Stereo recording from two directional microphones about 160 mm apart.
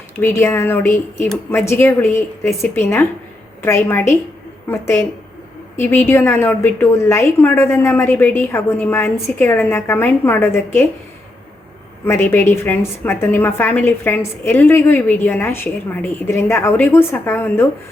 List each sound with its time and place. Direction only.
0.2 s a woman's voice: 15° left (ahead or behind)
12.0 s a woman's voice: 15° left (ahead or behind)